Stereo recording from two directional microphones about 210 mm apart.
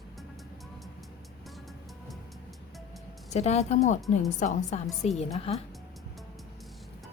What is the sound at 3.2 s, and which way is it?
Speech, 30° left (ahead or behind).